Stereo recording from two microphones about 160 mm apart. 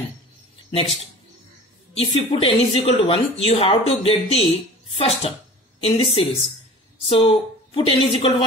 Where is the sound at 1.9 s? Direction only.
35° left (ahead or behind).